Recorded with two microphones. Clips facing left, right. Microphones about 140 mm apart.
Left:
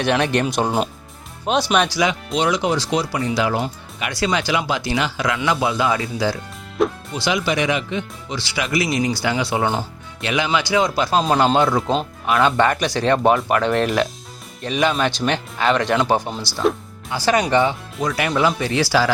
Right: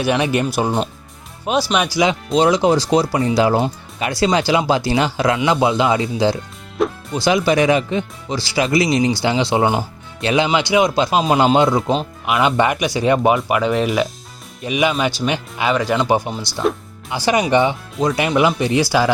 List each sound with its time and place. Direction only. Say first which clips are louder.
0.0 s speech: right 1 dB; 5° right (ahead or behind)
2.3 s speech: right 9 dB; 35° right (ahead or behind)
7.1 s speech: right 5 dB; 40° right (ahead or behind); by 11.8 s 15° right (ahead or behind)
11.8 s speech: right 1 dB; 5° right (ahead or behind)
17.1 s speech: right 2 dB; 15° right (ahead or behind)